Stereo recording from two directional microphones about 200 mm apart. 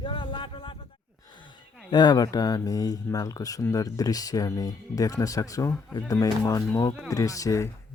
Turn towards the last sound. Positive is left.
turn(degrees=15)  # may be behind; listen again after turning